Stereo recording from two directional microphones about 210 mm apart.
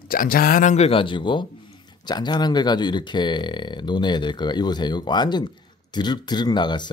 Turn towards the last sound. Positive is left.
turn(degrees=20)  # may be behind; listen again after turning